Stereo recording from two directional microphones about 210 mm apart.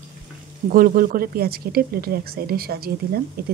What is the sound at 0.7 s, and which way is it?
A woman's voice, 40° right (ahead or behind).